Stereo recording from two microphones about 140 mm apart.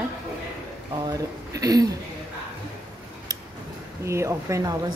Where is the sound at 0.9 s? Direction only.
25° right (ahead or behind).